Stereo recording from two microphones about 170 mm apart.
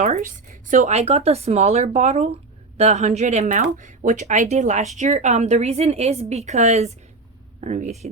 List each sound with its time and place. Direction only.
0.0 s speech: 50° right (ahead or behind)